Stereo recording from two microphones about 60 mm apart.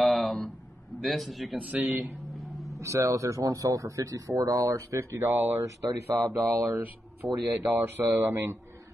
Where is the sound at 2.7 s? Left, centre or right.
Right.